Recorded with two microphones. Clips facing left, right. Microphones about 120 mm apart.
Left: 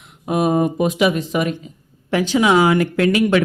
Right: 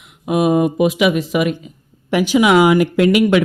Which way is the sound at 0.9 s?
35° left (ahead or behind).